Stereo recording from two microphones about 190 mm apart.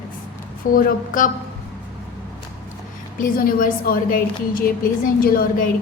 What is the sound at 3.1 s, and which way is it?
A woman's voice, 50° left (ahead or behind).